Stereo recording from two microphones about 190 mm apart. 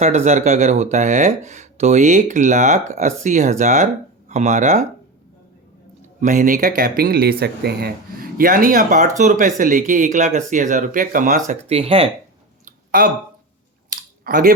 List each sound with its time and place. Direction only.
0.0 s speech: 35° right (ahead or behind)
6.1 s speech: 45° right (ahead or behind)
12.6 s a sound: 45° right (ahead or behind)